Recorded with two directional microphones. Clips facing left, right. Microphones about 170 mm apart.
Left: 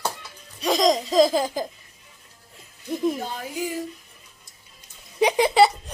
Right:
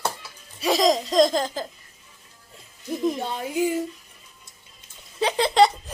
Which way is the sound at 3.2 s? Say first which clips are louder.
Right 5 dB; 25° right (ahead or behind).